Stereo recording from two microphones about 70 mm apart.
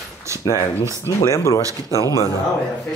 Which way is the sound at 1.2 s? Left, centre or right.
Left.